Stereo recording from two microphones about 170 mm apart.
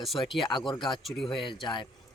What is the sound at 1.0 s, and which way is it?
Speech, centre (ahead or behind).